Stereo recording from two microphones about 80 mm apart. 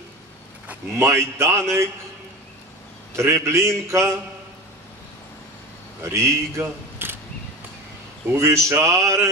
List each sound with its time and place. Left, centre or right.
0.9 s speech: right
3.2 s speech: right
6.1 s speech: right
8.3 s speech: right